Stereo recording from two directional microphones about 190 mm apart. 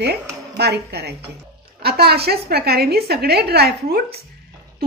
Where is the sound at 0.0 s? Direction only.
60° right (ahead or behind).